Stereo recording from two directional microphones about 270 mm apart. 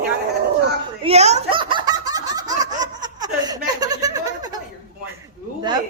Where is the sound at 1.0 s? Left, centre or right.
Right.